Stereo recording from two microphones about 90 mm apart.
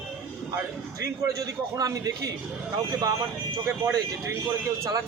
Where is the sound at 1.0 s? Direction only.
40° right (ahead or behind).